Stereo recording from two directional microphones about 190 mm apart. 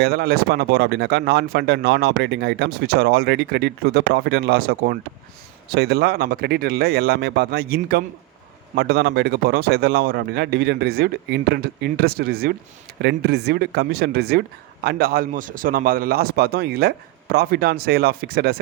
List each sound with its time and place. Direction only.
0.0 s speech: 55° right (ahead or behind)